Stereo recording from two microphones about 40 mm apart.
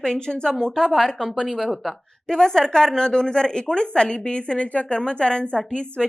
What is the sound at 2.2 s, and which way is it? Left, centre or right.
A woman's voice, centre.